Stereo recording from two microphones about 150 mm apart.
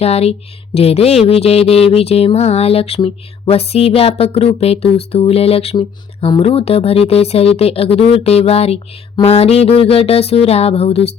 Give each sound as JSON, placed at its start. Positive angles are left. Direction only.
{"t": 0.0, "sound": "speech", "side_deg": 45}